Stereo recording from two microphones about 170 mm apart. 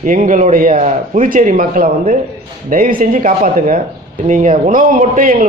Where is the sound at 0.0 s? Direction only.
50° right (ahead or behind).